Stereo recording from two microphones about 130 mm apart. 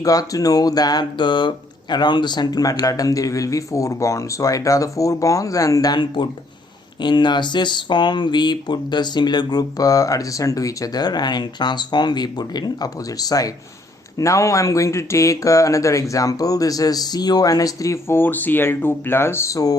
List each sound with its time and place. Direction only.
0.0 s speech: 25° left (ahead or behind)